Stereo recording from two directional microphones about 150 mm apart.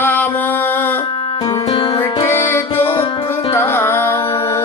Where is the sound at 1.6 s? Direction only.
35° left (ahead or behind).